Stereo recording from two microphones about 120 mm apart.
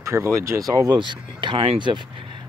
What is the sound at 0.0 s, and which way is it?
Speech, 25° right (ahead or behind).